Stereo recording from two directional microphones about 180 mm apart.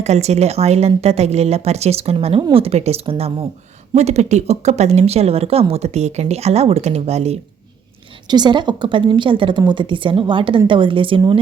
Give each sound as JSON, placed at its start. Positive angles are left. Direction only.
{"t": 0.0, "sound": "speech", "side_deg": -40}
{"t": 8.3, "sound": "a woman's voice", "side_deg": -25}